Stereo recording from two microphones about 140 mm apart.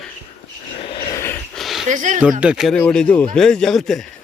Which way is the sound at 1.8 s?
60° right (ahead or behind).